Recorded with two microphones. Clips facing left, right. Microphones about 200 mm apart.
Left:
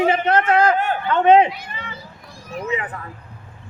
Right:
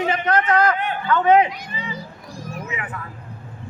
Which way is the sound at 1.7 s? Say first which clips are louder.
Right 3 dB; 55° left (ahead or behind).